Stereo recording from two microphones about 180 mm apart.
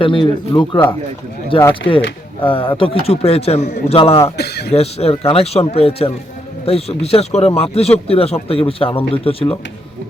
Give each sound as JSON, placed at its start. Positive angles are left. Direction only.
{"t": 0.0, "sound": "speech", "side_deg": 30}
{"t": 4.4, "sound": "speech", "side_deg": 65}
{"t": 4.7, "sound": "speech", "side_deg": 35}